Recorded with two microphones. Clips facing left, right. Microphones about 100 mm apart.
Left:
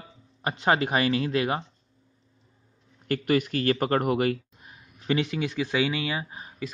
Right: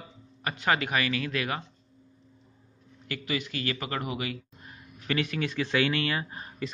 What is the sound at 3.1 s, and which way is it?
Speech, 50° left (ahead or behind).